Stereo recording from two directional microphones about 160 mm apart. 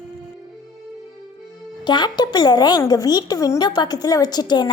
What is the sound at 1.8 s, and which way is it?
Speech, 25° left (ahead or behind).